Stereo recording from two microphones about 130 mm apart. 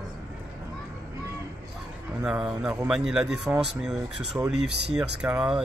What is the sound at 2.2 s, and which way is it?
Speech, 5° right (ahead or behind).